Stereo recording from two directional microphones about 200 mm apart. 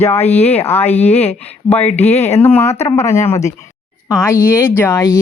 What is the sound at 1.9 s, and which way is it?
Speech, 10° left (ahead or behind).